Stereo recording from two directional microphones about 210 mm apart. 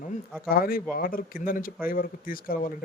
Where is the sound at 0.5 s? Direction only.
45° left (ahead or behind).